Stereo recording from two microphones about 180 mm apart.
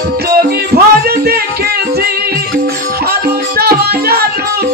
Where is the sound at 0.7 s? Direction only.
60° right (ahead or behind).